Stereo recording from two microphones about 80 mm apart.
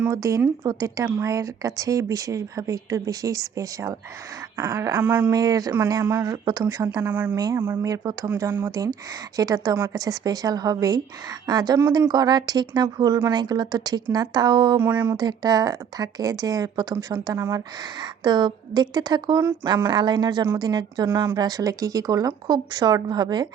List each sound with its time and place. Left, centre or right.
0.1 s speech: right
4.5 s speech: right
5.3 s speech: right
6.0 s speech: right
6.4 s speech: right
7.0 s speech: right
7.9 s speech: right
8.4 s speech: right
9.3 s speech: right
14.8 s speech: right
15.1 s speech: right
18.0 s speech: right